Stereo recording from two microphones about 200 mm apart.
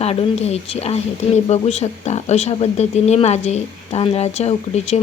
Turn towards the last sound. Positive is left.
turn(degrees=35)  # may be behind; listen again after turning